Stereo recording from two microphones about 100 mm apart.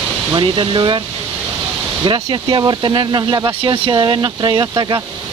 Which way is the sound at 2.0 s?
50° right (ahead or behind).